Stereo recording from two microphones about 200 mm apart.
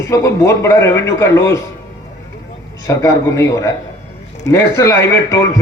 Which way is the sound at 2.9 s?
15° left (ahead or behind).